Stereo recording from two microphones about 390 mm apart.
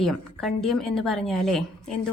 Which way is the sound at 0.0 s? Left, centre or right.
Centre.